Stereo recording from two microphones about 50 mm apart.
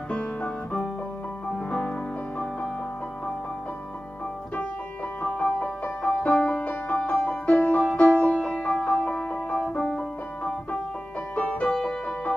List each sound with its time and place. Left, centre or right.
0.1 s music: left
5.2 s music: left
6.4 s music: left
9.3 s music: centre
9.8 s music: left